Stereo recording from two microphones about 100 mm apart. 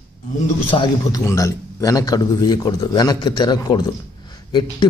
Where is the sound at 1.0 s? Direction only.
30° left (ahead or behind).